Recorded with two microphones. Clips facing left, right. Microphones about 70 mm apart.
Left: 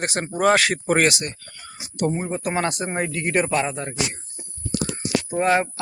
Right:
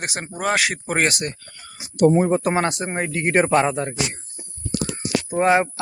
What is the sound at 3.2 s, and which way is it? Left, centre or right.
Speech, right.